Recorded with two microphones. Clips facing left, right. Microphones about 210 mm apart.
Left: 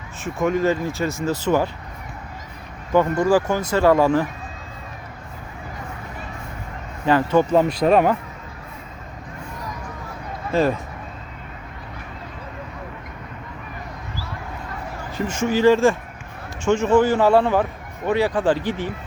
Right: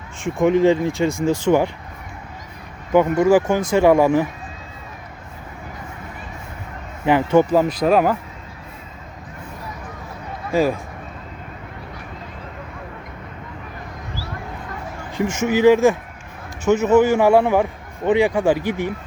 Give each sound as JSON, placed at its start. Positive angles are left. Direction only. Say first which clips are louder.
{"t": 0.3, "sound": "a man's voice", "louder": "right 5 dB", "side_deg": -20}
{"t": 2.9, "sound": "a man's voice", "louder": "right 3 dB", "side_deg": -15}
{"t": 7.0, "sound": "a man's voice", "louder": "right 2 dB", "side_deg": -15}
{"t": 7.5, "sound": "speech", "louder": "even", "side_deg": -5}
{"t": 10.5, "sound": "a man's voice", "louder": "right 1 dB", "side_deg": -10}
{"t": 15.2, "sound": "a man's voice", "louder": "right 2 dB", "side_deg": -15}
{"t": 16.6, "sound": "a man's voice", "louder": "right 2 dB", "side_deg": -5}